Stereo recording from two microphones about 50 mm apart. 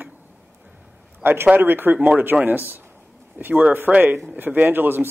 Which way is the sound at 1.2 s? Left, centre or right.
Right.